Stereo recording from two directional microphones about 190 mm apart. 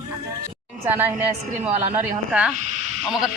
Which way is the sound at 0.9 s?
10° right (ahead or behind).